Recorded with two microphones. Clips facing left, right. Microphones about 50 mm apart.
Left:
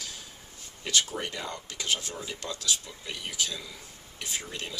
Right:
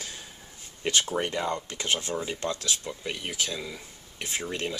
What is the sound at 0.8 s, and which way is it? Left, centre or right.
Speech, right.